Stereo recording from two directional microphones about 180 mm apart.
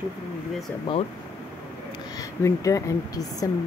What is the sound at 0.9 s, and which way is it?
Speech, 25° left (ahead or behind).